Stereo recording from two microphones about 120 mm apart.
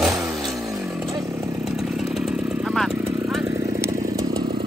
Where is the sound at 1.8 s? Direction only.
5° right (ahead or behind).